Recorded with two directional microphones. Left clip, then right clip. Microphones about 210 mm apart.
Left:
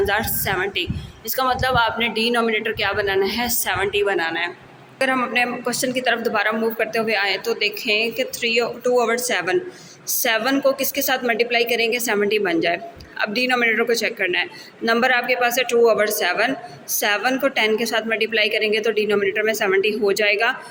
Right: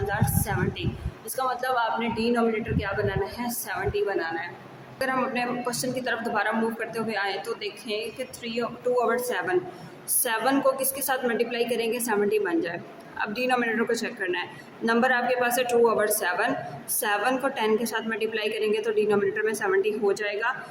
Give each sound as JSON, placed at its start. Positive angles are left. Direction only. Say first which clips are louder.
{"t": 0.1, "sound": "a woman's voice", "louder": "left 7 dB", "side_deg": 20}